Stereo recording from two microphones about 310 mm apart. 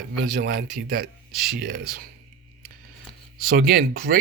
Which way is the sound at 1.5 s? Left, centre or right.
Right.